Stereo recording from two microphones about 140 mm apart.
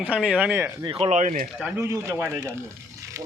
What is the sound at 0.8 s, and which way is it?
Speech, 40° right (ahead or behind).